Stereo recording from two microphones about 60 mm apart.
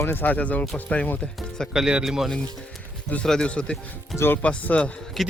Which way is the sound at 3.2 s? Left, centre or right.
Centre.